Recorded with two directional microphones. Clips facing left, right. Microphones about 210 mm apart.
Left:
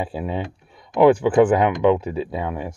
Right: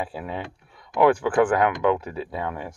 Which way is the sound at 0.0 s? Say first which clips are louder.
Left 5 dB; 25° left (ahead or behind).